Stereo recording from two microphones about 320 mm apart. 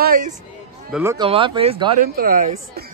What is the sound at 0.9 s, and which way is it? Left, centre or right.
Speech, centre.